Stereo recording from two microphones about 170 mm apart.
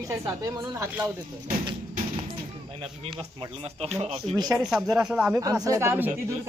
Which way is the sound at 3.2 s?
30° right (ahead or behind).